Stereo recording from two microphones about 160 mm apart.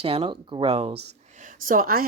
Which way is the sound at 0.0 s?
35° right (ahead or behind).